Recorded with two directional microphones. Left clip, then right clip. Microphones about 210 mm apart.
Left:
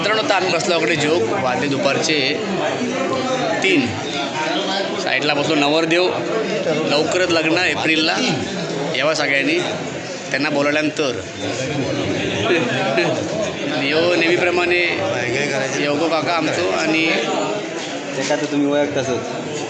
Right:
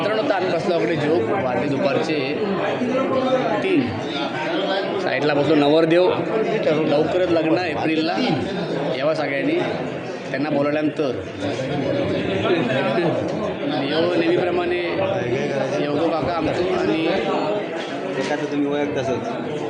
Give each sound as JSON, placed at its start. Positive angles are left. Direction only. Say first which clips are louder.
{"t": 0.0, "sound": "a man's voice", "louder": "left 3 dB", "side_deg": 0}
{"t": 5.1, "sound": "a man's voice", "louder": "even", "side_deg": -35}
{"t": 6.9, "sound": "a man's voice", "louder": "left 2 dB", "side_deg": -15}
{"t": 14.2, "sound": "a sound", "louder": "left 3 dB", "side_deg": 15}
{"t": 18.7, "sound": "a man's voice", "louder": "left 6 dB", "side_deg": 40}